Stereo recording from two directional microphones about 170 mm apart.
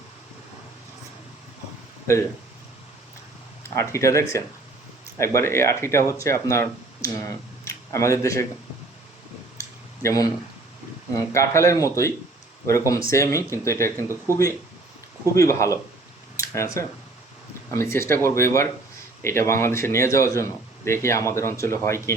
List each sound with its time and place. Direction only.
2.1 s speech: 15° left (ahead or behind)
3.6 s speech: 15° left (ahead or behind)
9.6 s a sound: 20° left (ahead or behind)
11.1 s speech: 20° left (ahead or behind)
13.9 s speech: 15° right (ahead or behind)
15.4 s speech: 15° left (ahead or behind)